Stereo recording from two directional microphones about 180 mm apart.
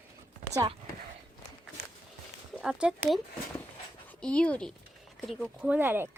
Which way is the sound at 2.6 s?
5° right (ahead or behind).